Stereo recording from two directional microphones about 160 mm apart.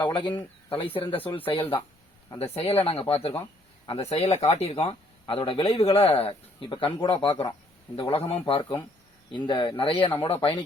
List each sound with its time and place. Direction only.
0.0 s speech: 30° left (ahead or behind)